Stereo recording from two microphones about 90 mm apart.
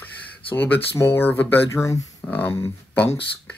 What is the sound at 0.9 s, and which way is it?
Speech, 25° left (ahead or behind).